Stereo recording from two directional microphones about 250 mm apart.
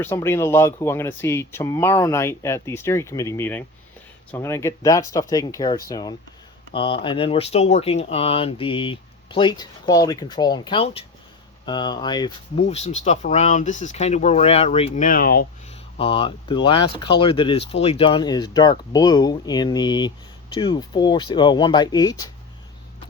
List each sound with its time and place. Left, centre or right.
0.0 s speech: centre; by 15.4 s left
16.0 s speech: left